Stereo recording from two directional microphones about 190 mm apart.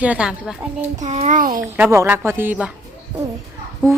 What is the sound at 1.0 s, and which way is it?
Speech, 40° right (ahead or behind).